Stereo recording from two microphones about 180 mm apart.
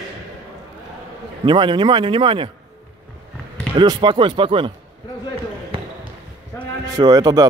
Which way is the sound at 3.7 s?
25° right (ahead or behind).